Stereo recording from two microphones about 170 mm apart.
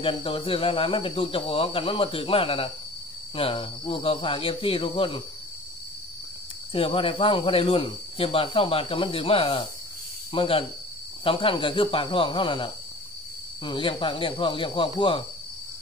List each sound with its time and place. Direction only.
0.0 s speech: 30° left (ahead or behind)
6.7 s speech: 30° left (ahead or behind)